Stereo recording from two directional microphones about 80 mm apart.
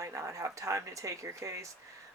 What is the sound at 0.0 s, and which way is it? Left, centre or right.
Speech, right.